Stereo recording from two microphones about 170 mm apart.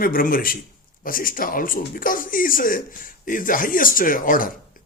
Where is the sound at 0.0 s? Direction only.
55° left (ahead or behind).